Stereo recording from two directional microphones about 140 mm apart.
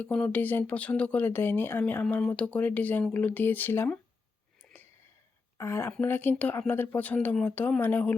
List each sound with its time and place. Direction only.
0.0 s speech: 10° left (ahead or behind)
4.7 s a sound: 15° left (ahead or behind)
5.5 s speech: 20° left (ahead or behind)